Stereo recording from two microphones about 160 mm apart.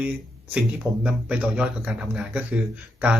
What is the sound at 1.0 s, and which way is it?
Speech, 10° right (ahead or behind).